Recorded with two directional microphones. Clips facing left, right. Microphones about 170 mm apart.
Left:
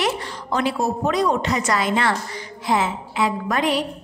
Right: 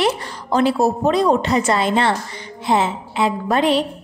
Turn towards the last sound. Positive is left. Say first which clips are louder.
# right 4 dB
turn(degrees=-30)  # may be behind; listen again after turning